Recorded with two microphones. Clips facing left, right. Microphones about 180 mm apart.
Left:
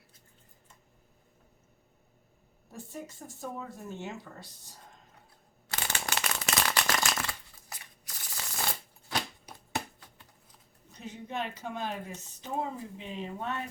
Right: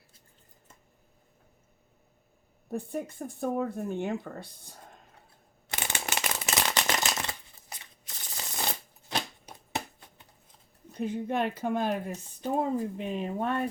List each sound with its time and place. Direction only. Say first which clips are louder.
2.6 s speech: right 9 dB; 60° right (ahead or behind)
5.6 s shuffling cards: right 1 dB; 20° right (ahead or behind)
10.9 s speech: right 8 dB; 55° right (ahead or behind)